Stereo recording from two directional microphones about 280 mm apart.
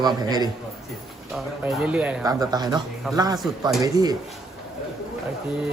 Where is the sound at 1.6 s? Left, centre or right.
Centre.